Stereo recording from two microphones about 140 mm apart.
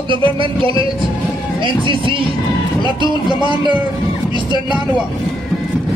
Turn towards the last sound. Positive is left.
turn(degrees=-35)  # may be behind; listen again after turning